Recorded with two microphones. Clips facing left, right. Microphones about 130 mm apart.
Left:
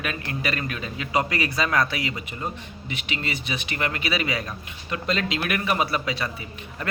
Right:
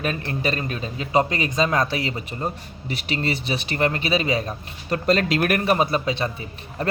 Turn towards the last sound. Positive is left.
turn(degrees=-35)  # may be behind; listen again after turning